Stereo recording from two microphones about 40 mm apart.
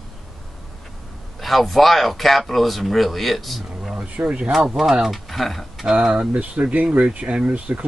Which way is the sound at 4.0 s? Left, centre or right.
Right.